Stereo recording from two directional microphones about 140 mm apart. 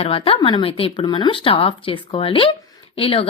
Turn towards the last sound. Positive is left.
turn(degrees=40)  # may be behind; listen again after turning